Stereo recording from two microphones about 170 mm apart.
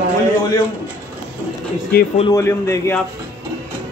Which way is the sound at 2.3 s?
15° left (ahead or behind).